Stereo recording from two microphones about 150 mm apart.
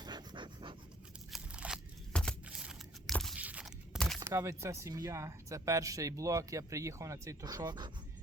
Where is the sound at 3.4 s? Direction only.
10° right (ahead or behind).